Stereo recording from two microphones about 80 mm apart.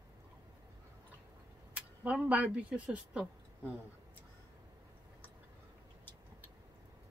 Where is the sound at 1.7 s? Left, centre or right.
Centre.